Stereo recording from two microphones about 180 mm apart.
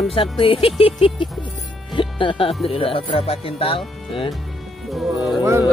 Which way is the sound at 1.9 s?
25° left (ahead or behind).